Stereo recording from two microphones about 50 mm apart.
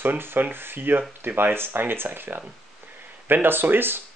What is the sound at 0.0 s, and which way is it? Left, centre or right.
Speech, right.